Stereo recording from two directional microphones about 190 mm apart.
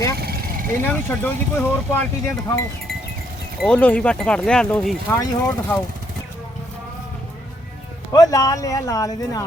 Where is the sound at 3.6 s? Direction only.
5° left (ahead or behind).